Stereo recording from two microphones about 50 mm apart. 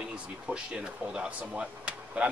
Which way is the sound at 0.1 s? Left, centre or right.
Centre.